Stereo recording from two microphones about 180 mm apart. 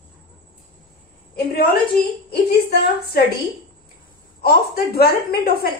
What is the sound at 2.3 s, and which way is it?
Speech, 65° left (ahead or behind).